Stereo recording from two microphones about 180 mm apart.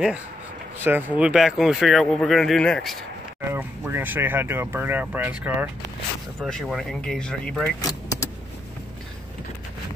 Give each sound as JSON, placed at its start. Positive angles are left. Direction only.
{"t": 0.7, "sound": "speech", "side_deg": -10}
{"t": 3.4, "sound": "speech", "side_deg": -10}
{"t": 7.8, "sound": "vehicle", "side_deg": 20}